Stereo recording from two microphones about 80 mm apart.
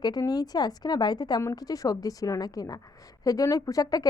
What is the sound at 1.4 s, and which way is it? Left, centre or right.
A woman's voice, left.